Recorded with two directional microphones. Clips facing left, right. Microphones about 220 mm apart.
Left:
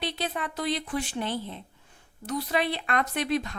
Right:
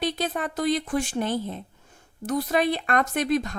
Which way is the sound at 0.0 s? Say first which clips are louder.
Right 5 dB; 45° right (ahead or behind).